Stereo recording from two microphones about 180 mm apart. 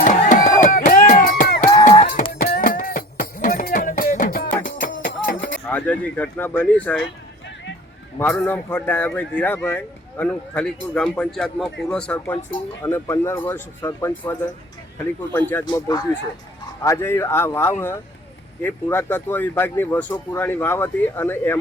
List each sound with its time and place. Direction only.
0.0 s a sound: 50° left (ahead or behind)
2.4 s music: 50° left (ahead or behind)
5.6 s speech: 10° left (ahead or behind)
8.2 s speech: 10° left (ahead or behind)
15.6 s speech: 25° left (ahead or behind)